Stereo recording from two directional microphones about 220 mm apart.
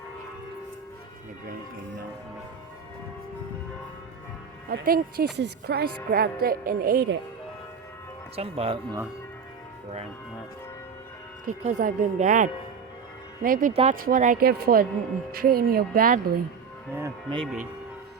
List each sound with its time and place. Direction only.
4.7 s speech: 45° right (ahead or behind)
8.4 s speech: 25° right (ahead or behind)
11.4 s speech: 35° right (ahead or behind)
17.4 s speech: 5° right (ahead or behind)